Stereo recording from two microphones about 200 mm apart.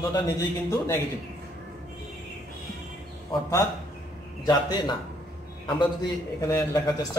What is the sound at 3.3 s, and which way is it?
A man's voice, 15° left (ahead or behind).